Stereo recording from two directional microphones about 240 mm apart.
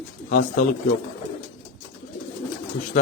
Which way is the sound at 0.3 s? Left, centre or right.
Left.